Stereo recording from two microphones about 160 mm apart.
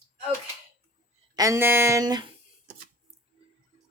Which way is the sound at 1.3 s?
20° right (ahead or behind).